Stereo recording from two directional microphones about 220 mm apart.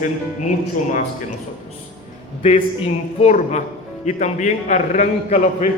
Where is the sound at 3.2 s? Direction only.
30° left (ahead or behind).